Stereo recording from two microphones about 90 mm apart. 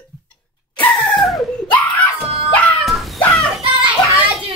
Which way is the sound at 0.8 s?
15° left (ahead or behind).